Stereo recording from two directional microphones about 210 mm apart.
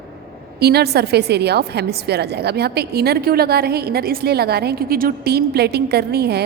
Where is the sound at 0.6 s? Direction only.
50° right (ahead or behind).